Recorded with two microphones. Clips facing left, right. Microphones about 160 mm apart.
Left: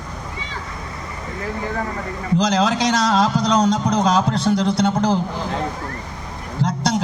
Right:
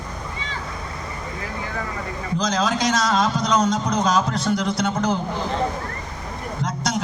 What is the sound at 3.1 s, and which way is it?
Speech, 30° left (ahead or behind).